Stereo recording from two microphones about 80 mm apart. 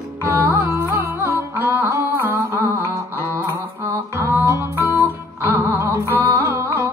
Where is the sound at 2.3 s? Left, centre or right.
Right.